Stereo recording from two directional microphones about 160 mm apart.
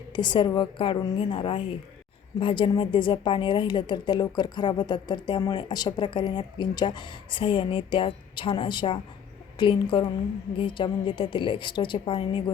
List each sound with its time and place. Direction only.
0.1 s a woman's voice: 30° left (ahead or behind)